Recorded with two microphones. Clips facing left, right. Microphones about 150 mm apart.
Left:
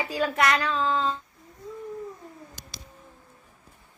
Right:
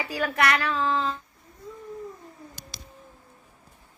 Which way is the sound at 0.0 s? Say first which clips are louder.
Left 1 dB; 20° left (ahead or behind).